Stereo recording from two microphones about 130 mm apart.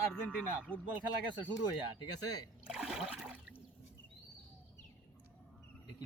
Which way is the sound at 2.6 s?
5° right (ahead or behind).